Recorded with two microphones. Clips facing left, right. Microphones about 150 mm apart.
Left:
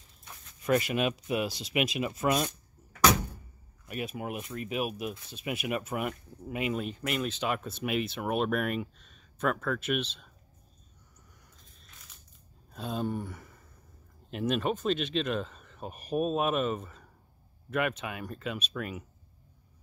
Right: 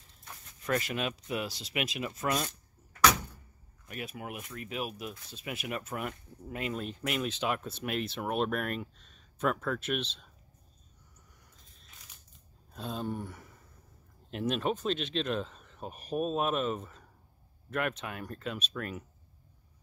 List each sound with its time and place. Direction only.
0.7 s speech: 15° left (ahead or behind)
3.8 s speech: 15° left (ahead or behind)
4.7 s speech: 15° left (ahead or behind)
12.7 s speech: 5° left (ahead or behind)